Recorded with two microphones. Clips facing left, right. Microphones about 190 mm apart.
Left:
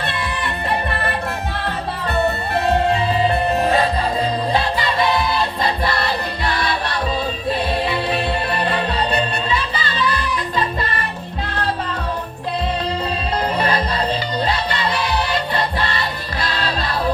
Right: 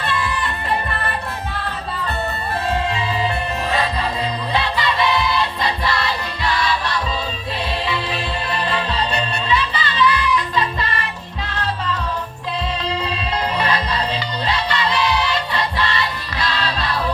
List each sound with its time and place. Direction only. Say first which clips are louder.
0.1 s music: right 1 dB; 65° left (ahead or behind)
2.9 s music: left 4 dB; 55° left (ahead or behind)
13.6 s music: left 2 dB; 50° left (ahead or behind)